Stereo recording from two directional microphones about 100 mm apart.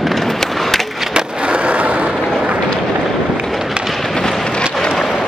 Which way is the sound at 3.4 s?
Centre (ahead or behind).